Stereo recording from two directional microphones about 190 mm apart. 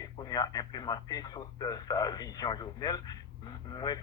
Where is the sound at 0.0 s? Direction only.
20° left (ahead or behind).